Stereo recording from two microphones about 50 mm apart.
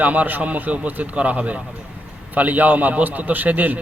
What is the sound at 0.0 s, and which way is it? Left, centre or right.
A man's voice, right.